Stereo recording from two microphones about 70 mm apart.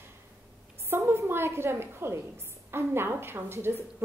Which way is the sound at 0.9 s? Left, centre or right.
Right.